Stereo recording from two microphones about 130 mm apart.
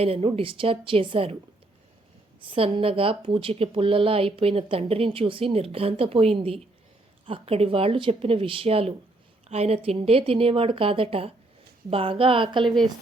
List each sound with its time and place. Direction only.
0.0 s speech: 50° right (ahead or behind)
2.5 s speech: 45° right (ahead or behind)